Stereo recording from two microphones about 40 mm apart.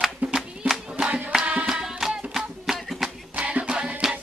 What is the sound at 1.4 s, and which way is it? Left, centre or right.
Music, right.